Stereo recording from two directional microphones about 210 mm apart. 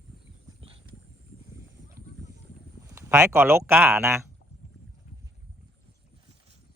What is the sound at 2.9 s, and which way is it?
Speech, 15° right (ahead or behind).